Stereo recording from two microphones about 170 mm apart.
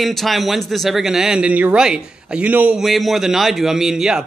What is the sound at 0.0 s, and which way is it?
Speech, centre (ahead or behind).